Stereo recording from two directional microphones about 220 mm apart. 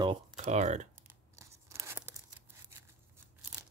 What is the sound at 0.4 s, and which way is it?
Speech, 30° right (ahead or behind).